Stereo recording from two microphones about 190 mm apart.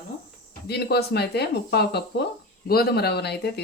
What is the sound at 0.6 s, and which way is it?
Speech, 60° left (ahead or behind).